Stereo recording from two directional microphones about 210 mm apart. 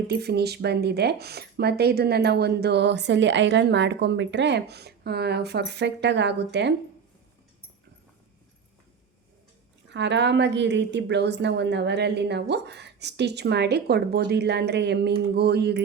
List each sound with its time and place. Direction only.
0.1 s speech: 50° right (ahead or behind)
9.9 s speech: 55° right (ahead or behind)